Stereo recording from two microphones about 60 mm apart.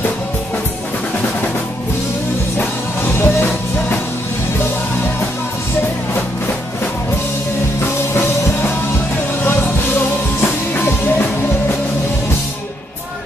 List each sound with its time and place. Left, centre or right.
3.1 s music: left
9.4 s music: left